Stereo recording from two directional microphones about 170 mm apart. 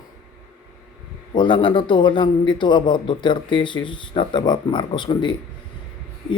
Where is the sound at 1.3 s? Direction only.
30° left (ahead or behind).